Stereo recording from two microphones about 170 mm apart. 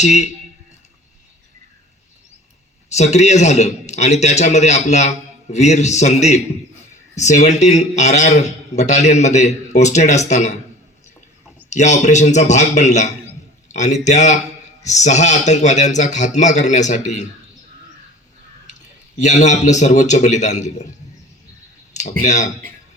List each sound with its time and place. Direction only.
0.0 s a man's voice: 45° left (ahead or behind)
2.9 s a man's voice: 40° left (ahead or behind)
11.7 s a man's voice: 45° left (ahead or behind)
19.2 s a man's voice: 45° left (ahead or behind)
22.2 s a man's voice: 45° left (ahead or behind)